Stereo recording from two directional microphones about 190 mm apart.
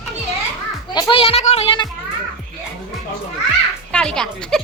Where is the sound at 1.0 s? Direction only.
25° left (ahead or behind).